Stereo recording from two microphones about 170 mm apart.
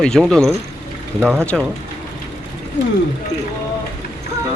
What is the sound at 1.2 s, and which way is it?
Speech, 10° right (ahead or behind).